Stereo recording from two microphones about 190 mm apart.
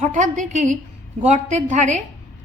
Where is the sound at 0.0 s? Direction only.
40° right (ahead or behind).